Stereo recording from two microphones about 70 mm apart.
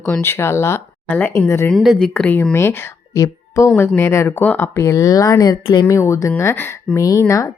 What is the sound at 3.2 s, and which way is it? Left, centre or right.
Speech, left.